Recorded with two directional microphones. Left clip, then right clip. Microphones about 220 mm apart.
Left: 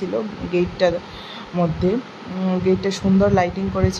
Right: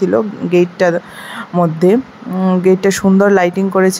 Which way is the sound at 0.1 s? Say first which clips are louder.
Right 10 dB; 30° right (ahead or behind).